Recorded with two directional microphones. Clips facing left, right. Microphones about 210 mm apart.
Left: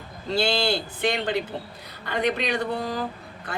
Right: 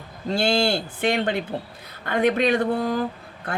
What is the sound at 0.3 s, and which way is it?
Speech, 50° right (ahead or behind).